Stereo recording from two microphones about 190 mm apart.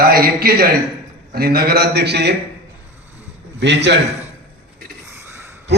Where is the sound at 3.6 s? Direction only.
65° right (ahead or behind).